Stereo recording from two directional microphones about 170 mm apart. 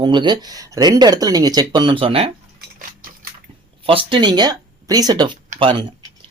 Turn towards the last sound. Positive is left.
turn(degrees=-30)  # may be behind; listen again after turning